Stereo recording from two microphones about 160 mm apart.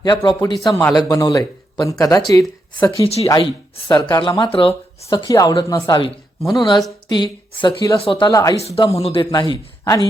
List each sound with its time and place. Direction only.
0.0 s speech: 25° left (ahead or behind)
0.7 s a man's voice: 10° left (ahead or behind)
0.9 s speech: 20° left (ahead or behind)
5.0 s speech: 25° left (ahead or behind)
8.3 s speech: 20° left (ahead or behind)
8.7 s speech: 40° left (ahead or behind)
9.3 s speech: 25° left (ahead or behind)